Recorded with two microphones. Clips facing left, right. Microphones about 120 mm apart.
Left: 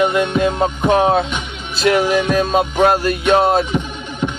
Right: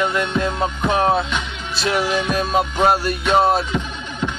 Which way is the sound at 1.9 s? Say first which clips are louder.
Left 6 dB; 60° left (ahead or behind).